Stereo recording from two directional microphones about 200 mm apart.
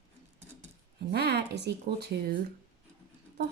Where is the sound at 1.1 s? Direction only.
55° right (ahead or behind).